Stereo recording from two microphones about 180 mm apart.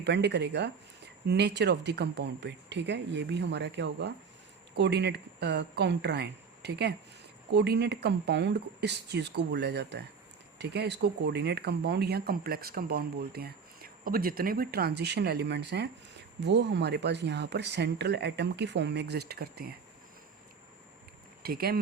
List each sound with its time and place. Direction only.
0.0 s speech: 70° right (ahead or behind)
21.4 s speech: 55° right (ahead or behind)